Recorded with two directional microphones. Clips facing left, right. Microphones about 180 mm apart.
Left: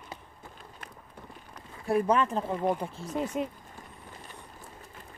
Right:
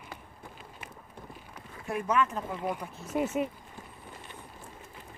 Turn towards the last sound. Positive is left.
turn(degrees=-5)  # may be behind; listen again after turning